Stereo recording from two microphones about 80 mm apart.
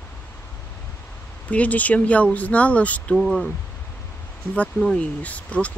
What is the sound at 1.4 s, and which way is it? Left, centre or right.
Speech, centre.